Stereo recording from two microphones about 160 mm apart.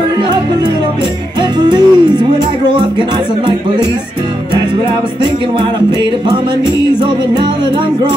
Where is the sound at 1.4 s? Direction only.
25° right (ahead or behind).